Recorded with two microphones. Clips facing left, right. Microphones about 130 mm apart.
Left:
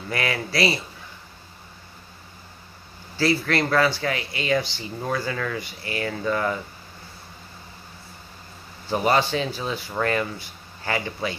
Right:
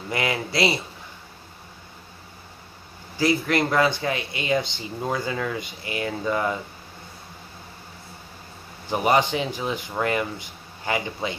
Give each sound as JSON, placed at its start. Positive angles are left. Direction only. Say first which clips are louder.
{"t": 0.1, "sound": "speech", "louder": "right 1 dB", "side_deg": -20}
{"t": 3.2, "sound": "speech", "louder": "right 1 dB", "side_deg": -15}
{"t": 8.8, "sound": "speech", "louder": "right 1 dB", "side_deg": -15}